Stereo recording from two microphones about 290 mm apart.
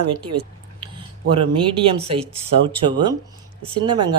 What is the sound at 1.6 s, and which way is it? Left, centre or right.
Speech, centre.